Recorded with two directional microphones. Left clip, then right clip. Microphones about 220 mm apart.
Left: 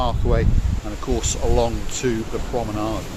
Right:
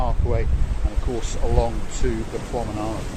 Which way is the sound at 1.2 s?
35° left (ahead or behind).